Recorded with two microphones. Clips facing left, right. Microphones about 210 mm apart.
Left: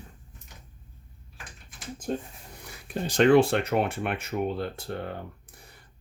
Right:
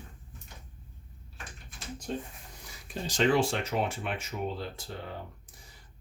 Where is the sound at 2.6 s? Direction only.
60° left (ahead or behind).